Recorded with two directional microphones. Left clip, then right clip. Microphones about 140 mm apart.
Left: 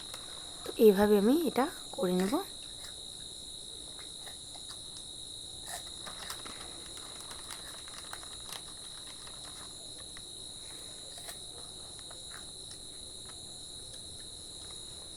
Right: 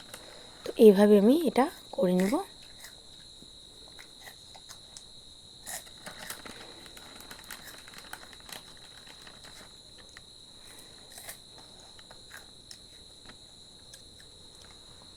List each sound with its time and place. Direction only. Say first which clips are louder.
0.6 s speech: right 5 dB; 20° right (ahead or behind)